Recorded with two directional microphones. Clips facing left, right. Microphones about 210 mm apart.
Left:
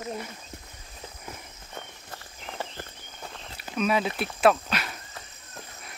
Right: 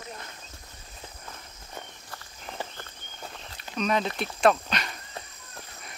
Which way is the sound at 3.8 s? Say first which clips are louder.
Left 1 dB; 5° left (ahead or behind).